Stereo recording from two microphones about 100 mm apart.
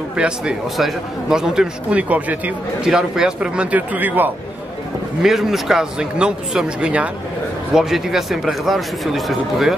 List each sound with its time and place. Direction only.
0.1 s a man's voice: 10° right (ahead or behind)
5.2 s a man's voice: 5° right (ahead or behind)